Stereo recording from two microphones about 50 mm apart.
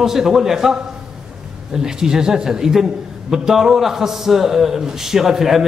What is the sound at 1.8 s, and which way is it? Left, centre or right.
A man's voice, centre.